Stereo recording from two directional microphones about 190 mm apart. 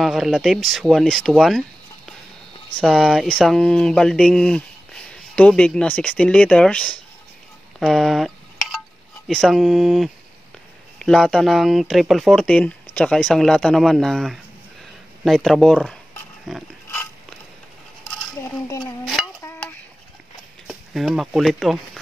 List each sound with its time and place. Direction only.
0.0 s speech: centre (ahead or behind)
2.7 s speech: centre (ahead or behind)
9.3 s speech: centre (ahead or behind)
18.7 s dishes: 20° left (ahead or behind)
19.2 s stir: centre (ahead or behind)
20.6 s speech: centre (ahead or behind)